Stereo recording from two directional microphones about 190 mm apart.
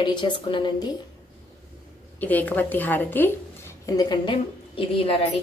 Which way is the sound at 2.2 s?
10° left (ahead or behind).